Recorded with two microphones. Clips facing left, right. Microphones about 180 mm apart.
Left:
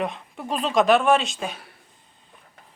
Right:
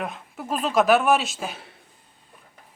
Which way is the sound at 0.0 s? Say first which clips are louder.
Left 3 dB; 5° right (ahead or behind).